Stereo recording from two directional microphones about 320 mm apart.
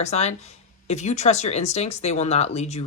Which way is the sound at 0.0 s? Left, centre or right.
Left.